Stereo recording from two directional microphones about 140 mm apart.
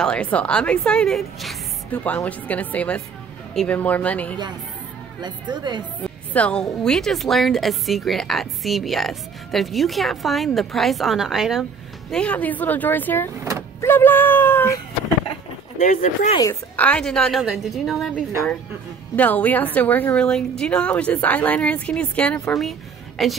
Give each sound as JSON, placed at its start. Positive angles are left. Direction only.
{"t": 0.0, "sound": "a woman's voice", "side_deg": 5}
{"t": 5.2, "sound": "a woman's voice", "side_deg": -30}
{"t": 6.0, "sound": "a woman's voice", "side_deg": 10}
{"t": 12.1, "sound": "a woman's voice", "side_deg": 10}
{"t": 13.4, "sound": "vehicle", "side_deg": -20}
{"t": 13.7, "sound": "speech", "side_deg": 15}
{"t": 15.8, "sound": "speech", "side_deg": 65}
{"t": 16.7, "sound": "a woman's voice", "side_deg": 10}
{"t": 19.1, "sound": "a woman's voice", "side_deg": 10}